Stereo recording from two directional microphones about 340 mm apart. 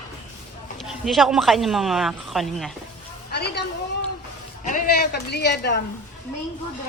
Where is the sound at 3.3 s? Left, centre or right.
Left.